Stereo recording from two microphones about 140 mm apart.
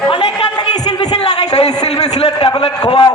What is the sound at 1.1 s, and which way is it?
A man's voice, 50° left (ahead or behind).